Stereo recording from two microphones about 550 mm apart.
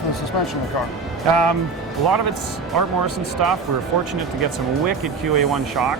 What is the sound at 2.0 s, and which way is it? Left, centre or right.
Speech, right.